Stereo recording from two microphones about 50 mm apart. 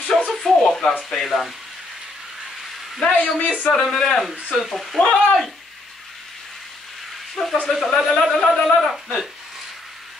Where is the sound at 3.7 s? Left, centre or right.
Centre.